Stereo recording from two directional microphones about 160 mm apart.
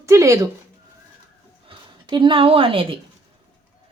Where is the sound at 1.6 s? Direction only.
30° right (ahead or behind).